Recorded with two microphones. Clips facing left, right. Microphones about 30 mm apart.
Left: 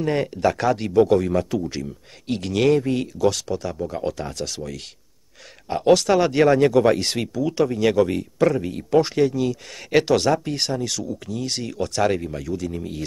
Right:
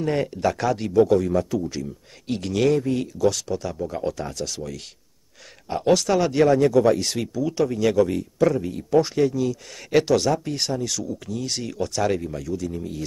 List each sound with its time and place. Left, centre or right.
0.0 s speech: centre; by 1.6 s left
2.2 s speech: centre
2.9 s speech: left
3.4 s speech: centre
4.0 s speech: left
6.4 s speech: left
8.5 s speech: left
10.4 s speech: left